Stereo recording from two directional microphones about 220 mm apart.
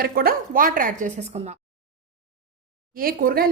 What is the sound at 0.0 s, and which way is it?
A woman's voice, 45° right (ahead or behind).